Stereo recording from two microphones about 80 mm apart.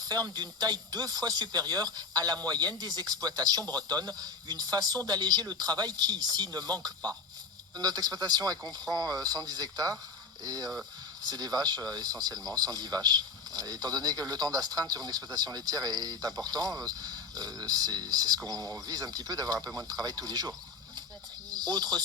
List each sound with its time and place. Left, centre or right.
0.0 s speech: right
7.8 s speech: right